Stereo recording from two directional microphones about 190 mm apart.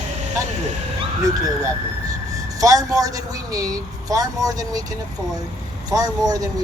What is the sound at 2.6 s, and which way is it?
Speech, 20° right (ahead or behind).